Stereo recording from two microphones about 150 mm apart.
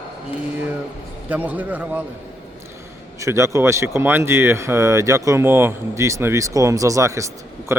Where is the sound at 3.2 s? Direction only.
20° right (ahead or behind).